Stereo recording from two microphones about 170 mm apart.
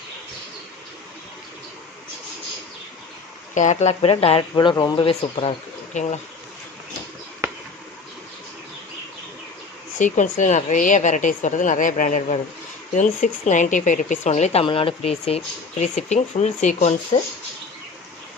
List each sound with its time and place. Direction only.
3.5 s speech: 45° left (ahead or behind)
4.6 s speech: 25° left (ahead or behind)
5.9 s speech: 45° left (ahead or behind)
9.9 s speech: 50° left (ahead or behind)